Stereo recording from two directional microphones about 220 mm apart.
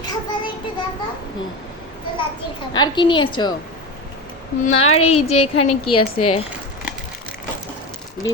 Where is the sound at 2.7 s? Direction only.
20° left (ahead or behind).